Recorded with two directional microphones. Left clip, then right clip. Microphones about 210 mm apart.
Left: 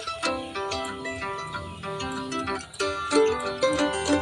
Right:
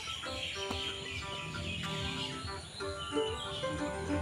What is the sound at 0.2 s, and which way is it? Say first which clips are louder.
Music: left 9 dB; 50° left (ahead or behind).